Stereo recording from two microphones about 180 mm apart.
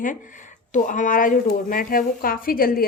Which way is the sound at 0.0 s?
45° left (ahead or behind).